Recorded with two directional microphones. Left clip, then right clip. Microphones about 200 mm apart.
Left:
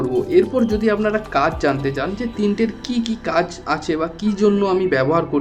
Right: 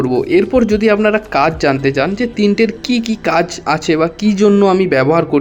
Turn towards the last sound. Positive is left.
turn(degrees=-25)  # may be behind; listen again after turning